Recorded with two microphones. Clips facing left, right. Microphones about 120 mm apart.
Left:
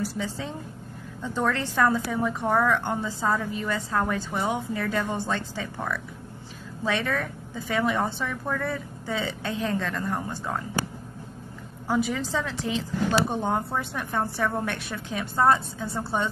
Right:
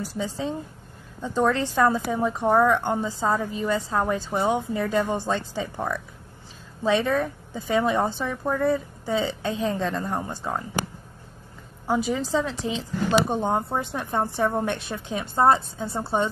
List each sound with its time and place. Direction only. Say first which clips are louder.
0.0 s a woman's voice: right 2 dB; 20° right (ahead or behind)
11.9 s speech: right 2 dB; 20° right (ahead or behind)